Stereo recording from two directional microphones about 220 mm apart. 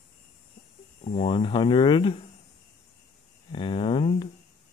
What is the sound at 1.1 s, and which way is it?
Speech, 30° left (ahead or behind).